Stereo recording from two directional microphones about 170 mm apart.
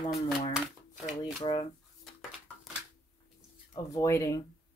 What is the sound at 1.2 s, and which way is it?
Shuffling cards, 30° left (ahead or behind).